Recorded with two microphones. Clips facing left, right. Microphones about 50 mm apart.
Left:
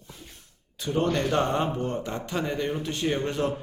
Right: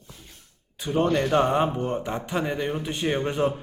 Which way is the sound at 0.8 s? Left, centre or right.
Centre.